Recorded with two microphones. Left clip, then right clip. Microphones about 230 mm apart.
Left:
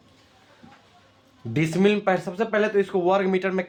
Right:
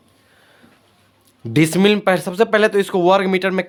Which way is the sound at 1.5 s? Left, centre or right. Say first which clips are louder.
Right 7 dB; right.